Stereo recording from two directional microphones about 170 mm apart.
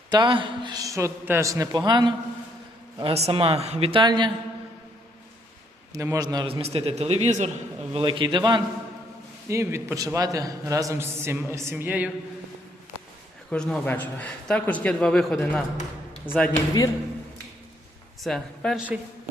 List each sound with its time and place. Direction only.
0.1 s a man's voice: 25° right (ahead or behind)
3.0 s a man's voice: 35° right (ahead or behind)
5.9 s a man's voice: 20° right (ahead or behind); by 7.5 s 40° right (ahead or behind)
7.9 s a man's voice: 30° right (ahead or behind); by 12.1 s 10° right (ahead or behind)
13.5 s a man's voice: 5° left (ahead or behind)
18.2 s a man's voice: centre (ahead or behind)